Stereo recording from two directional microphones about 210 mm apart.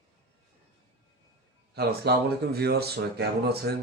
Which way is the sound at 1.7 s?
50° right (ahead or behind).